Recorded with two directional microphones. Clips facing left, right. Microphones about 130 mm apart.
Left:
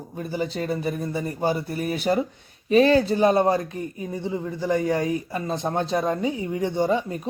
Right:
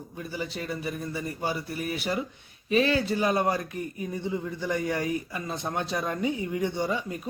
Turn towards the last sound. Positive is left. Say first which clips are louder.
# left 6 dB
turn(degrees=35)  # may be behind; listen again after turning